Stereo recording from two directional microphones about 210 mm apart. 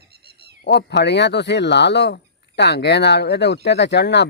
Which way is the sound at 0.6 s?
50° left (ahead or behind).